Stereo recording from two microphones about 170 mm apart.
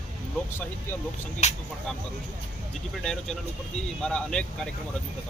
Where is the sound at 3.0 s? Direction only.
5° left (ahead or behind).